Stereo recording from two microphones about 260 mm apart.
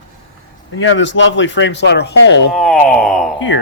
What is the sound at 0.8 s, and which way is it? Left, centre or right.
Speech, left.